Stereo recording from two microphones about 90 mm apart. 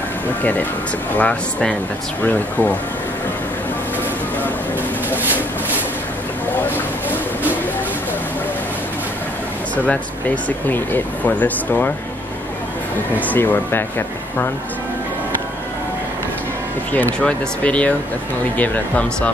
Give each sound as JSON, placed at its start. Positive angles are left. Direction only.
{"t": 0.4, "sound": "speech", "side_deg": 20}
{"t": 2.2, "sound": "speech", "side_deg": 20}
{"t": 5.1, "sound": "a sound", "side_deg": -20}
{"t": 9.8, "sound": "speech", "side_deg": 20}
{"t": 13.1, "sound": "speech", "side_deg": 20}
{"t": 16.9, "sound": "speech", "side_deg": 15}